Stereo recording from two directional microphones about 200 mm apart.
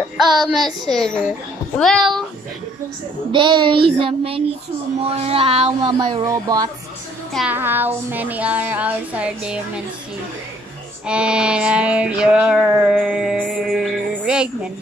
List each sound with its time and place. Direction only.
0.2 s child singing: centre (ahead or behind)
3.3 s speech: 25° right (ahead or behind)
7.3 s speech: 10° right (ahead or behind)
11.1 s child singing: 5° right (ahead or behind)